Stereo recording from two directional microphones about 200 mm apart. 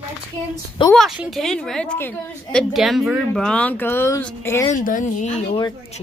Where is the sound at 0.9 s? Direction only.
Centre (ahead or behind).